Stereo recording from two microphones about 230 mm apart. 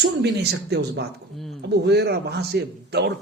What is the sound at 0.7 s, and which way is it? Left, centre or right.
Speech, right.